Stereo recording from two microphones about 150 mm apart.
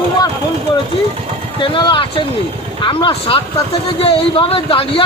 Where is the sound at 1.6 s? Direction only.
35° left (ahead or behind).